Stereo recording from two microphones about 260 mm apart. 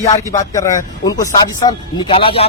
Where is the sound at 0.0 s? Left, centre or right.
Centre.